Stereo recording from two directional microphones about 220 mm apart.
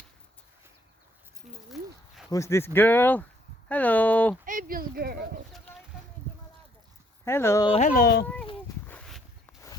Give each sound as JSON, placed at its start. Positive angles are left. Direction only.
{"t": 1.5, "sound": "a sound", "side_deg": 0}
{"t": 2.3, "sound": "speech", "side_deg": 15}
{"t": 4.4, "sound": "speech", "side_deg": -40}
{"t": 7.3, "sound": "speech", "side_deg": 10}
{"t": 7.7, "sound": "speech", "side_deg": 35}
{"t": 8.9, "sound": "walk", "side_deg": 5}